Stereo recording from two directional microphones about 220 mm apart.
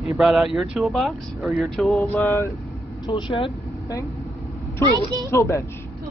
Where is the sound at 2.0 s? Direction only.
10° left (ahead or behind).